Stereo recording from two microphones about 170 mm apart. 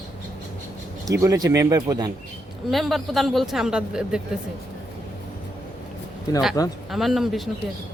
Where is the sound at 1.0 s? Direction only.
20° right (ahead or behind).